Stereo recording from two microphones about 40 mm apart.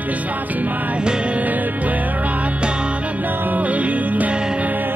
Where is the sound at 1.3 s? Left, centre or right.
Right.